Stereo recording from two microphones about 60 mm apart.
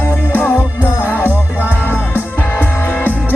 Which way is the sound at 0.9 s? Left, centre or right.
Left.